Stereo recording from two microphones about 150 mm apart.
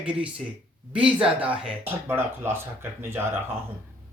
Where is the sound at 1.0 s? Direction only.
35° right (ahead or behind).